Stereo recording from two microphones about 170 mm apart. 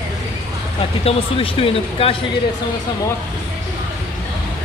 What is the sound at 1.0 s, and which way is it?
Speech, 35° left (ahead or behind).